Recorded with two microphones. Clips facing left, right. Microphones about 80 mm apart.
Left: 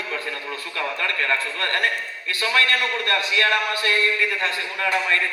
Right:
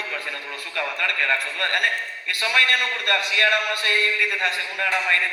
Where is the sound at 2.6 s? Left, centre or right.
Left.